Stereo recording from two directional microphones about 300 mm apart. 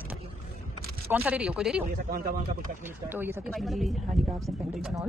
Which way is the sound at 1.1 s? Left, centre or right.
Centre.